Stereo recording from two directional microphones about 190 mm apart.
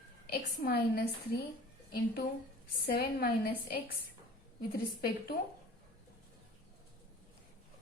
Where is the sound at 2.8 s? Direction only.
55° left (ahead or behind).